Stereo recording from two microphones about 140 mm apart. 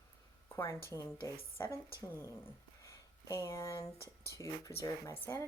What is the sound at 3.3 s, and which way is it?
Speech, 25° left (ahead or behind).